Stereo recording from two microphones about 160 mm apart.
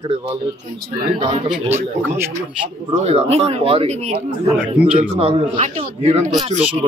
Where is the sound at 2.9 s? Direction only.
40° right (ahead or behind).